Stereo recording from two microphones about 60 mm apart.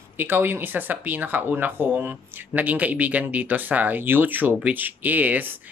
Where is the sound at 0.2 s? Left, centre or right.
Right.